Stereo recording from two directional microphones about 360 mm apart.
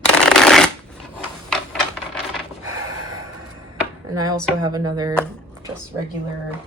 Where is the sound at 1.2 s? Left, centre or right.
Centre.